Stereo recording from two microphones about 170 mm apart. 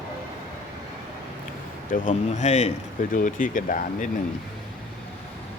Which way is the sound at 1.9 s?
50° left (ahead or behind).